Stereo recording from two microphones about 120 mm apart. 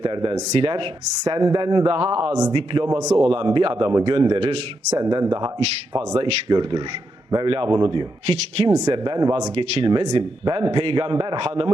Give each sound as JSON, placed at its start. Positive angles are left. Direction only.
{"t": 0.0, "sound": "a man's voice", "side_deg": -45}
{"t": 4.4, "sound": "a man's voice", "side_deg": -55}
{"t": 4.9, "sound": "a man's voice", "side_deg": -30}
{"t": 8.9, "sound": "speech", "side_deg": -40}
{"t": 9.6, "sound": "a man's voice", "side_deg": -50}